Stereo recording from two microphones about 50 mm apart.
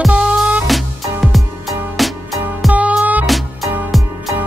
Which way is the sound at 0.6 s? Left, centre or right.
Centre.